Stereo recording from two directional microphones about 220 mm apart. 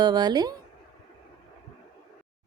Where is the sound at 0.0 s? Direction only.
20° right (ahead or behind).